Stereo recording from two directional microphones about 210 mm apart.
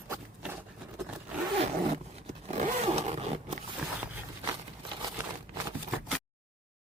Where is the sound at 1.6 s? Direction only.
30° right (ahead or behind).